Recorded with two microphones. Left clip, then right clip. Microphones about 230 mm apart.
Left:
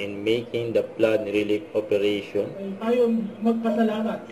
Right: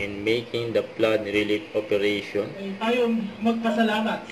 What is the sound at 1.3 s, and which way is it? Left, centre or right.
Speech, right.